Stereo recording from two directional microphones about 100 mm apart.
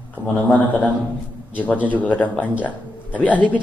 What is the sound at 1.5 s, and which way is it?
Speech, 15° left (ahead or behind).